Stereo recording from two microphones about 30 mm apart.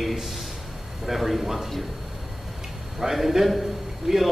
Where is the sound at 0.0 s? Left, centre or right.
Centre.